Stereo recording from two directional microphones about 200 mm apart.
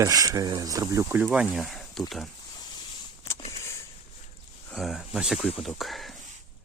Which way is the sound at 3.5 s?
15° left (ahead or behind).